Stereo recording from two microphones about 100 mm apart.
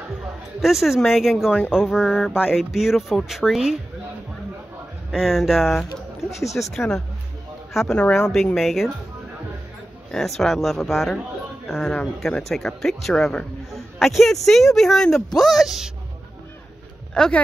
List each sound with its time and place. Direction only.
0.6 s speech: centre (ahead or behind)
5.1 s speech: centre (ahead or behind)
10.1 s speech: centre (ahead or behind)
17.1 s speech: 10° left (ahead or behind)